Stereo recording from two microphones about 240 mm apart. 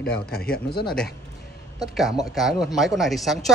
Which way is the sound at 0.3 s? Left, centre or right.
Left.